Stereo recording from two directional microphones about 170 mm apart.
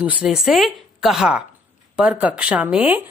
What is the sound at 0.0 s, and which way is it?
A woman's voice, 5° right (ahead or behind).